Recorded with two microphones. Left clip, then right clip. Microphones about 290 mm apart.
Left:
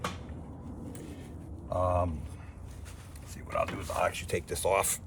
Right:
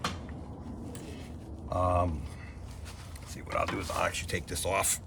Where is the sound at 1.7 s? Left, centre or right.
Centre.